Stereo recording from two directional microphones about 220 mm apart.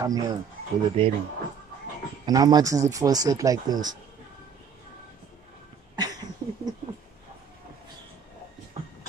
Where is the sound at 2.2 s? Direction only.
15° right (ahead or behind).